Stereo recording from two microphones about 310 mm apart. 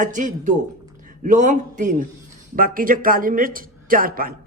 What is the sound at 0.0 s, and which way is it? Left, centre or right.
A man's voice, right.